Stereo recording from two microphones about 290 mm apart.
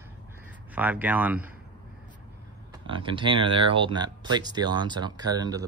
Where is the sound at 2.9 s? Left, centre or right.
Centre.